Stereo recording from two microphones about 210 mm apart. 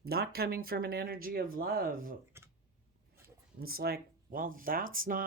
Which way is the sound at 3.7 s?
45° right (ahead or behind).